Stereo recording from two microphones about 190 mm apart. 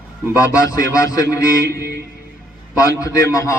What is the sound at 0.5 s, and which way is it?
Speech, 20° left (ahead or behind).